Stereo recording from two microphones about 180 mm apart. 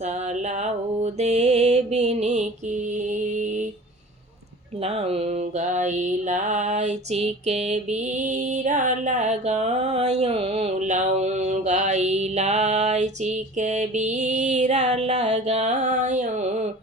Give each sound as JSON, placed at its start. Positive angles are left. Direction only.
{"t": 0.0, "sound": "music", "side_deg": -40}
{"t": 4.8, "sound": "mantra", "side_deg": -35}